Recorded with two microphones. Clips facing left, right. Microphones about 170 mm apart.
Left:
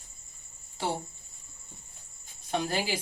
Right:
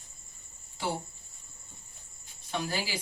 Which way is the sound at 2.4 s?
50° left (ahead or behind).